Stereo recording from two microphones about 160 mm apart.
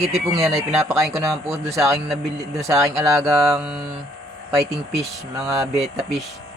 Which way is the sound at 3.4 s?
Centre (ahead or behind).